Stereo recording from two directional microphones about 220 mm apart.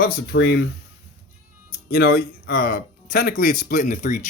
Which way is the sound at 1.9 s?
45° left (ahead or behind).